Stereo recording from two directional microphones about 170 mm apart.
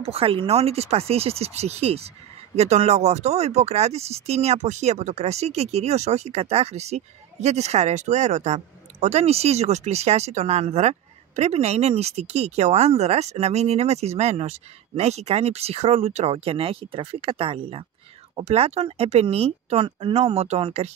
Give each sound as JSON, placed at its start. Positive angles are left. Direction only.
{"t": 0.0, "sound": "speech", "side_deg": -35}